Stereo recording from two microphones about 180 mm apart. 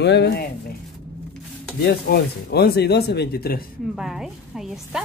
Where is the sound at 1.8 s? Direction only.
65° left (ahead or behind).